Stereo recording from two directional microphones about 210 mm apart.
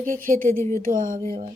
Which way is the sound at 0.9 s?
40° right (ahead or behind).